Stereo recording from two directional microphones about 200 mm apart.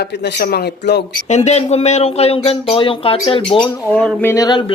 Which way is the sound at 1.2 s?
35° left (ahead or behind).